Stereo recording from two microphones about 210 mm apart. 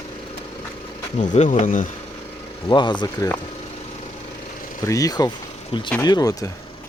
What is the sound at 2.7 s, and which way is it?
Speech, 20° left (ahead or behind).